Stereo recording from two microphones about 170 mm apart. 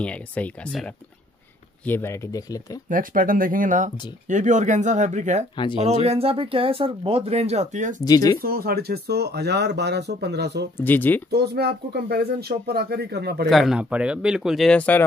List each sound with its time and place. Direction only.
0.0 s speech: 10° left (ahead or behind)
2.9 s speech: 55° right (ahead or behind)
5.6 s speech: 30° left (ahead or behind)
6.0 s speech: 35° right (ahead or behind)
8.0 s speech: 20° left (ahead or behind)
8.4 s speech: 60° right (ahead or behind); by 10.7 s 75° right (ahead or behind)
10.8 s speech: 10° left (ahead or behind)
11.2 s speech: 70° right (ahead or behind)
13.5 s speech: centre (ahead or behind)